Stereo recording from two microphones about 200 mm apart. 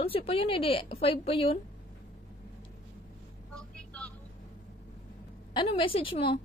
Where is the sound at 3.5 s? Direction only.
5° left (ahead or behind).